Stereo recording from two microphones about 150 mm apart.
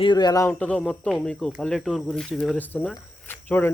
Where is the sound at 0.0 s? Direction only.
30° left (ahead or behind).